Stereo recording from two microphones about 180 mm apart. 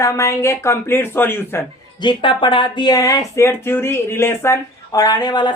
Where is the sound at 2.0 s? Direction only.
25° left (ahead or behind).